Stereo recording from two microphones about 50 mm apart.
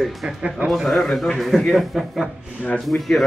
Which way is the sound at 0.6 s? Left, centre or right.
Centre.